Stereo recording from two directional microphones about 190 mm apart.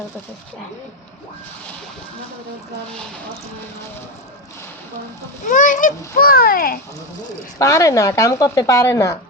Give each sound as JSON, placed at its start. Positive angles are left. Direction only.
{"t": 5.5, "sound": "a child's voice", "side_deg": 45}
{"t": 7.6, "sound": "a woman's voice", "side_deg": 15}